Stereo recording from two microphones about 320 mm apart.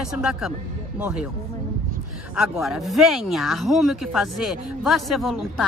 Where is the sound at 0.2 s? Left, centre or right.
Centre.